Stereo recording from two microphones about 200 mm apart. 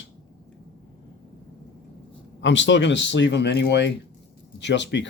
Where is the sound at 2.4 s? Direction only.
65° left (ahead or behind).